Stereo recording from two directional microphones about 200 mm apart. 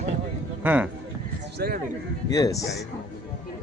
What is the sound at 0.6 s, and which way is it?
Speech, 10° right (ahead or behind).